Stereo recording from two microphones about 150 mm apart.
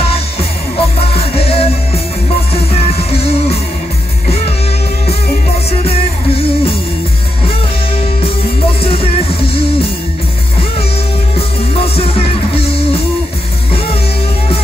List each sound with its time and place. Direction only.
0.1 s music: 40° left (ahead or behind)
5.7 s music: 40° left (ahead or behind)
8.8 s music: 40° left (ahead or behind)
11.3 s music: 40° left (ahead or behind)